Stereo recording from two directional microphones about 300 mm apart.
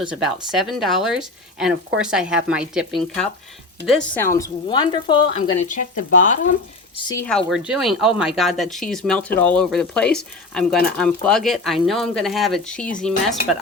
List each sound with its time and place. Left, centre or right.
0.1 s speech: centre; by 7.0 s left
7.1 s speech: centre